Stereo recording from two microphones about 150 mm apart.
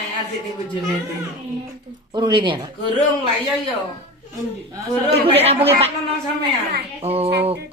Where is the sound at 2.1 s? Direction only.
30° right (ahead or behind).